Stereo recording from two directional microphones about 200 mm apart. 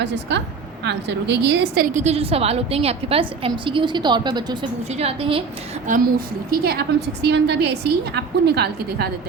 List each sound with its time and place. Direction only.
0.0 s a woman's voice: 60° right (ahead or behind); by 5.4 s 30° right (ahead or behind)
5.9 s a woman's voice: 50° right (ahead or behind)